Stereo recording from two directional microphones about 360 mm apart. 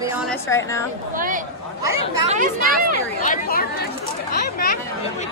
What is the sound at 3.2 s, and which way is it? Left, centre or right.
Speech, left.